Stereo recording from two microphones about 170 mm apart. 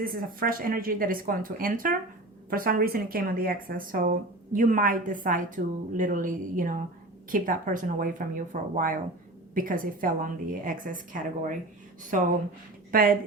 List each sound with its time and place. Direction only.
0.0 s a woman's voice: 60° right (ahead or behind)